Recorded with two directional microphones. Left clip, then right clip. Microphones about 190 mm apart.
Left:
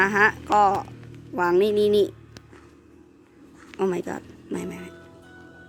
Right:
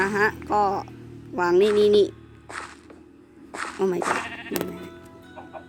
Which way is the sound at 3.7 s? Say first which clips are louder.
Even; centre (ahead or behind).